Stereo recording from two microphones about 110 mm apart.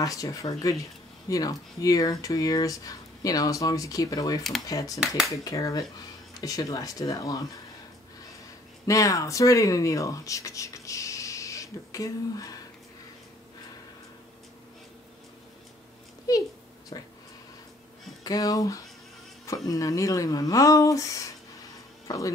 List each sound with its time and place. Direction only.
0.0 s speech: 30° left (ahead or behind)
5.0 s speech: 5° right (ahead or behind)
5.4 s speech: 30° left (ahead or behind)
8.8 s speech: 30° left (ahead or behind)
16.3 s speech: 35° left (ahead or behind)
18.2 s speech: 35° left (ahead or behind)
22.0 s music: 30° left (ahead or behind)